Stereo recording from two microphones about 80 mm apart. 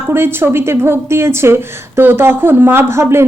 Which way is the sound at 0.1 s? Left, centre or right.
Right.